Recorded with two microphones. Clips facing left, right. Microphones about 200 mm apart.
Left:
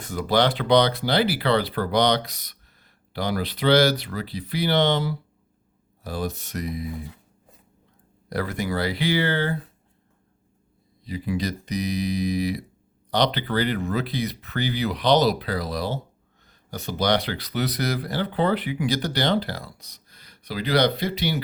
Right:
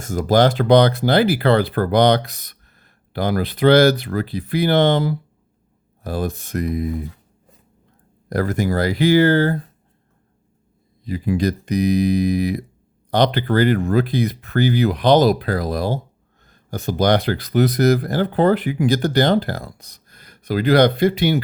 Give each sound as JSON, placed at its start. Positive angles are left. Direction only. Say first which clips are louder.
{"t": 0.0, "sound": "speech", "louder": "right 6 dB", "side_deg": -45}
{"t": 8.3, "sound": "speech", "louder": "right 6 dB", "side_deg": -45}
{"t": 11.0, "sound": "speech", "louder": "right 7 dB", "side_deg": -50}